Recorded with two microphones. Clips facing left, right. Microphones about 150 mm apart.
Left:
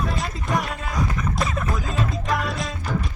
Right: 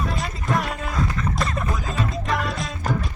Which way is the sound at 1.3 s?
Centre (ahead or behind).